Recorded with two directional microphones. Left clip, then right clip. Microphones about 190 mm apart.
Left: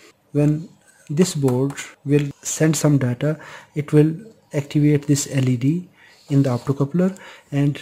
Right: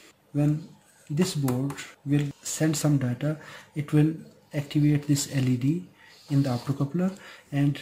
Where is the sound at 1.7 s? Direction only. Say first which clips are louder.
Left 9 dB; 50° left (ahead or behind).